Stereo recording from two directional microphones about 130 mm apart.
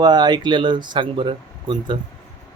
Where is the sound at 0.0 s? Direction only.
35° right (ahead or behind).